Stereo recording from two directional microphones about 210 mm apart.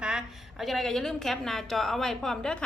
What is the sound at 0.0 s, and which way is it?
A woman's voice, 5° right (ahead or behind).